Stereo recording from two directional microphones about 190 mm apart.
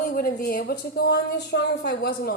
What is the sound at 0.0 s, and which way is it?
A woman's voice, 50° left (ahead or behind).